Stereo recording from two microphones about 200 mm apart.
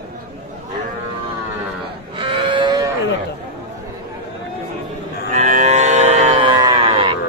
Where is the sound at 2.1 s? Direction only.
25° right (ahead or behind).